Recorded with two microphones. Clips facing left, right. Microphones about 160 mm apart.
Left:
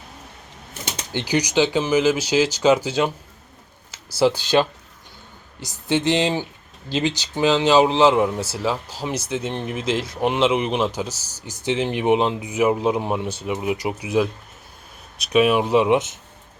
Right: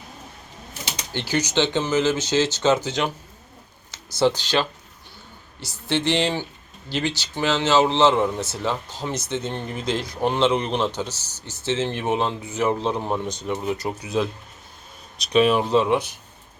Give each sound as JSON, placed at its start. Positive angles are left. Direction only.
{"t": 1.1, "sound": "speech", "side_deg": 15}
{"t": 5.9, "sound": "speech", "side_deg": 15}